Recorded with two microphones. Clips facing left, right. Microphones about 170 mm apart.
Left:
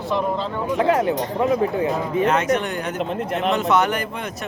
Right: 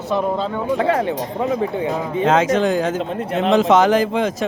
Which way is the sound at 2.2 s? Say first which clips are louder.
Right 6 dB; 90° right.